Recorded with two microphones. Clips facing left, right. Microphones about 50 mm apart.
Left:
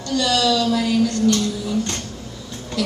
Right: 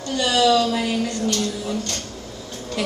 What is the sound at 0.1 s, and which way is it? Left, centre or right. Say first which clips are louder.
A woman's voice: right 1 dB; right.